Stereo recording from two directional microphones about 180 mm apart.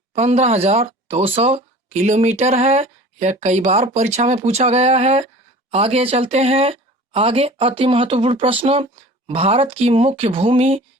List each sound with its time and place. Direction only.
0.1 s speech: 35° right (ahead or behind)